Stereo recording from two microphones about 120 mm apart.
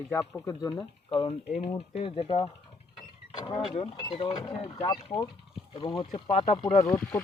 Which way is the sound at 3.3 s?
40° left (ahead or behind).